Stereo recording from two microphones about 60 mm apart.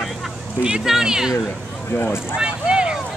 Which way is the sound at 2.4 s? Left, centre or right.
Centre.